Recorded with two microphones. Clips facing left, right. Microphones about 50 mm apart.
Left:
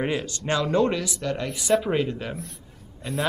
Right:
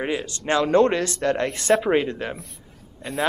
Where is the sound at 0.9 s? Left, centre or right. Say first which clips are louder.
Right 6 dB; right.